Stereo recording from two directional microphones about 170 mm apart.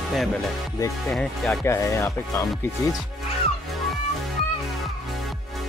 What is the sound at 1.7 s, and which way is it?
Speech, 15° left (ahead or behind).